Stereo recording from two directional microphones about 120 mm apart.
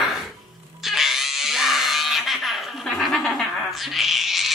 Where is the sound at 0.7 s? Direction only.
Centre (ahead or behind).